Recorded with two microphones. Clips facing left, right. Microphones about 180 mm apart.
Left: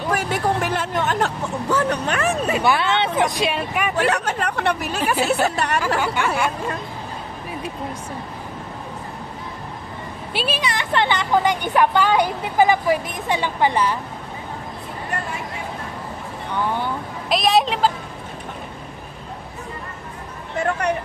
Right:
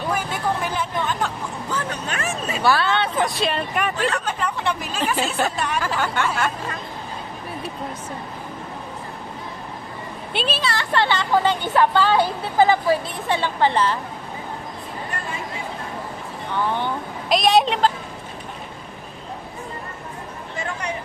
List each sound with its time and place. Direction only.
0.1 s speech: 75° left (ahead or behind)
2.6 s speech: 20° left (ahead or behind)
3.9 s speech: 70° left (ahead or behind)
10.3 s speech: 10° left (ahead or behind)
16.7 s a woman's voice: 5° left (ahead or behind)
20.5 s speech: 60° left (ahead or behind)